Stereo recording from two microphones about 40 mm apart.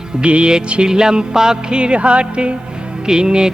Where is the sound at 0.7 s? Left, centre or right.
Right.